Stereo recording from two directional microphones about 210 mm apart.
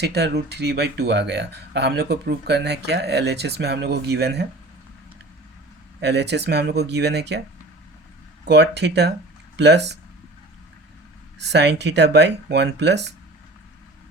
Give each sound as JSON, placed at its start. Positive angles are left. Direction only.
{"t": 0.0, "sound": "speech", "side_deg": -50}
{"t": 6.0, "sound": "speech", "side_deg": -55}
{"t": 8.4, "sound": "speech", "side_deg": -55}
{"t": 11.3, "sound": "speech", "side_deg": -55}